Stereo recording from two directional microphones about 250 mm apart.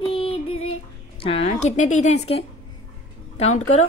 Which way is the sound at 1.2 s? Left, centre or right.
Left.